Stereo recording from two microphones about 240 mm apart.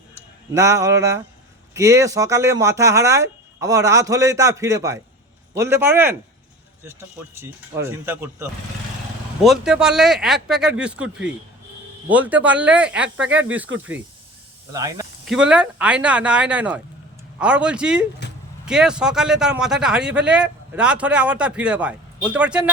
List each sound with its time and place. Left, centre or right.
0.1 s a man's voice: centre
7.3 s speech: centre
14.7 s speech: centre
18.2 s a sound: left
18.6 s speech: centre